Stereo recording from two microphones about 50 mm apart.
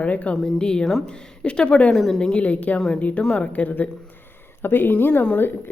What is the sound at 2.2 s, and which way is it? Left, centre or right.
A woman's voice, left.